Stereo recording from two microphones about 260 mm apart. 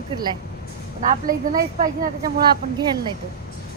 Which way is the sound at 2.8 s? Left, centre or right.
Centre.